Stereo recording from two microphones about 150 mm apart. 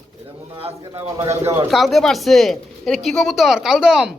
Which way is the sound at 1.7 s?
Centre (ahead or behind).